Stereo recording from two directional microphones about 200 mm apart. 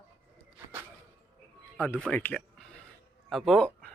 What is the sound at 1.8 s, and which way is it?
Speech, 10° left (ahead or behind).